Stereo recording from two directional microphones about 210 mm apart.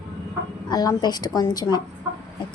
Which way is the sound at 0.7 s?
20° left (ahead or behind).